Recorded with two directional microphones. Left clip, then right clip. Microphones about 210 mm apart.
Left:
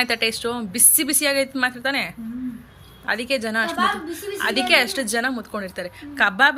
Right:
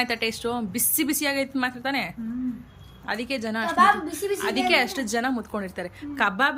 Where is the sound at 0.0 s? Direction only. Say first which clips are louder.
Left 4 dB; 10° right (ahead or behind).